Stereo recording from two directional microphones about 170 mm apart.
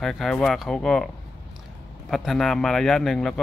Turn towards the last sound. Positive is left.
turn(degrees=0)  # may be behind; listen again after turning